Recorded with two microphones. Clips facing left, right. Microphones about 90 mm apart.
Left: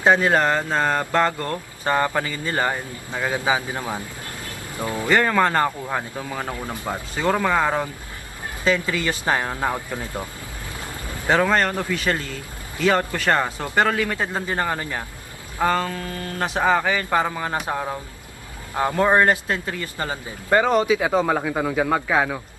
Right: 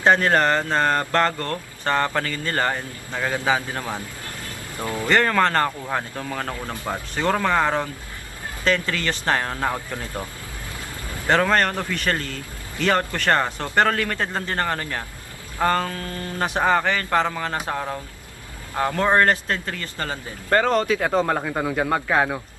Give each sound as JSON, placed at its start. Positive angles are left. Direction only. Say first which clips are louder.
{"t": 0.0, "sound": "speech", "louder": "even", "side_deg": 10}
{"t": 11.3, "sound": "speech", "louder": "even", "side_deg": 5}